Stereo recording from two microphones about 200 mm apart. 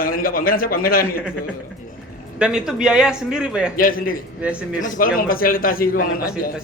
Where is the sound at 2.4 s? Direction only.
5° right (ahead or behind).